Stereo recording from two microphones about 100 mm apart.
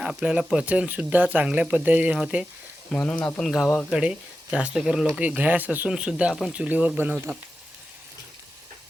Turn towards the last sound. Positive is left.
turn(degrees=-15)  # may be behind; listen again after turning